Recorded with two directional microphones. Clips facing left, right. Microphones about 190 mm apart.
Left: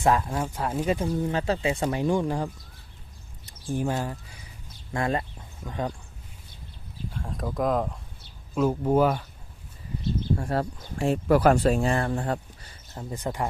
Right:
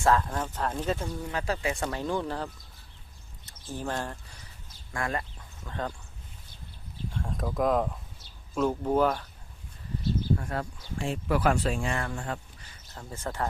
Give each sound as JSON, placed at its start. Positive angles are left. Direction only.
{"t": 0.0, "sound": "speech", "side_deg": 10}
{"t": 1.2, "sound": "speech", "side_deg": 25}
{"t": 4.9, "sound": "speech", "side_deg": 25}
{"t": 7.1, "sound": "speech", "side_deg": 0}
{"t": 10.3, "sound": "speech", "side_deg": 35}
{"t": 10.8, "sound": "speech", "side_deg": 45}
{"t": 12.9, "sound": "speech", "side_deg": 20}